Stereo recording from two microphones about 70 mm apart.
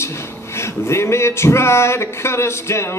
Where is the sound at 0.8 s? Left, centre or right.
Left.